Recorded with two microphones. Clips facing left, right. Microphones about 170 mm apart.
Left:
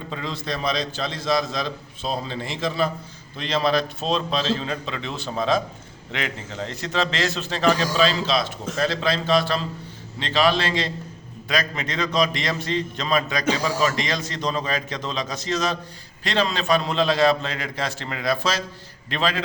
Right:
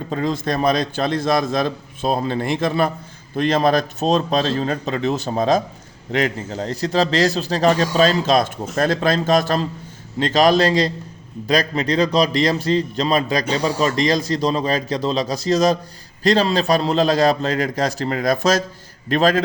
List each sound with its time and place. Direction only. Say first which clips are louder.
0.1 s a man's voice: right 9 dB; 45° right (ahead or behind)